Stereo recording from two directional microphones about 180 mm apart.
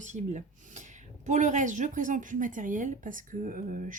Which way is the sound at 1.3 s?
40° right (ahead or behind).